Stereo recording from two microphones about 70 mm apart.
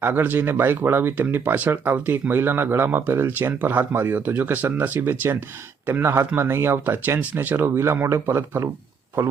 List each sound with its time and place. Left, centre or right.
0.0 s speech: right